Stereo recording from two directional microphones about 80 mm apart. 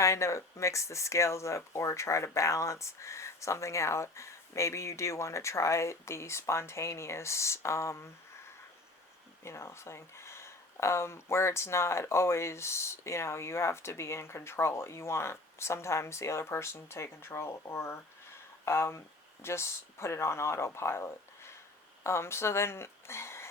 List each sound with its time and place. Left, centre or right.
0.0 s speech: left
9.4 s speech: left